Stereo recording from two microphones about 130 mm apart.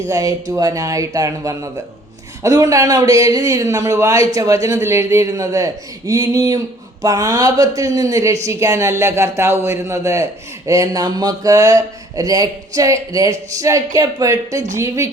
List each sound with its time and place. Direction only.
0.1 s speech: 25° right (ahead or behind)